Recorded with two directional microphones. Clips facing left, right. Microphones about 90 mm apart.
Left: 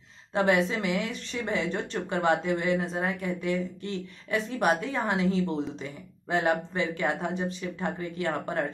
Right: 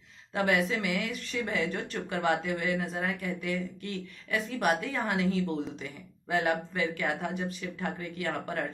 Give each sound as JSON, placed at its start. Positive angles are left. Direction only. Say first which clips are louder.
{"t": 0.3, "sound": "speech", "louder": "left 3 dB", "side_deg": 25}